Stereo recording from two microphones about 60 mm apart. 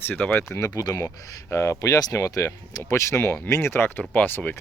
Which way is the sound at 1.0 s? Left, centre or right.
Left.